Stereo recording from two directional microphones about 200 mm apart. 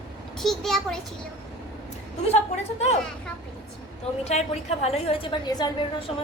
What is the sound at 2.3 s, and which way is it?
Speech, 35° left (ahead or behind).